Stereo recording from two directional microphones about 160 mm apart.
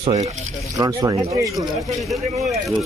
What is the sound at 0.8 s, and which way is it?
Speech, 20° right (ahead or behind).